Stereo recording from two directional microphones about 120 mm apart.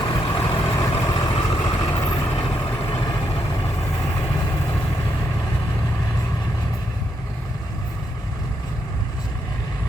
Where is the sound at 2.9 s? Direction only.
40° left (ahead or behind).